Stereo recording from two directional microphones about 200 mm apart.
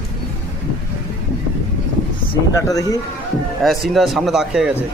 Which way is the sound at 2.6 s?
15° left (ahead or behind).